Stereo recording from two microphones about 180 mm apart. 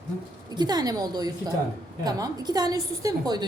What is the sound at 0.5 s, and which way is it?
A woman's voice, 20° right (ahead or behind).